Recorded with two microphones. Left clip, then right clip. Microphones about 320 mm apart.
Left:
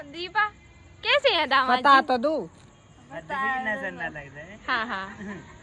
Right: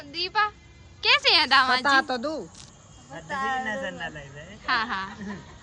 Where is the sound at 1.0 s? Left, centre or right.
Centre.